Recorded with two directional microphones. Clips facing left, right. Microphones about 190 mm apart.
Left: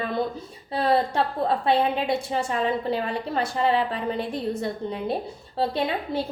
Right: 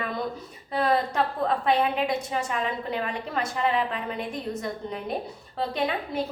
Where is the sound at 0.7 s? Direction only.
30° left (ahead or behind).